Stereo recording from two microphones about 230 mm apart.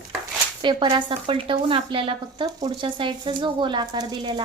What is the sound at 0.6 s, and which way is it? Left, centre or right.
Speech, right.